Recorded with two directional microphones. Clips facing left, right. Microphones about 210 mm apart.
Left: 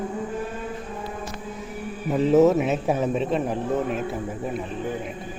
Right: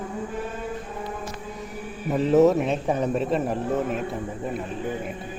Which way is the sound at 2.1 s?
Centre (ahead or behind).